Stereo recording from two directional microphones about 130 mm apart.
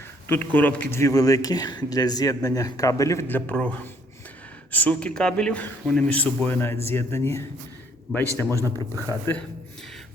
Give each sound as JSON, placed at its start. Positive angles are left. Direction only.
{"t": 0.3, "sound": "a man's voice", "side_deg": 10}
{"t": 0.9, "sound": "a man's voice", "side_deg": 25}
{"t": 8.1, "sound": "a man's voice", "side_deg": 5}
{"t": 8.6, "sound": "a man's voice", "side_deg": 20}